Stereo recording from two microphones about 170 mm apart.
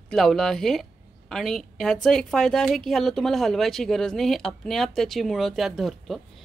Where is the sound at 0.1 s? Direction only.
Centre (ahead or behind).